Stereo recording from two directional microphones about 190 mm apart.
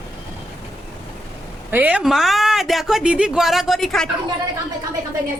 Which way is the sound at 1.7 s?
10° right (ahead or behind).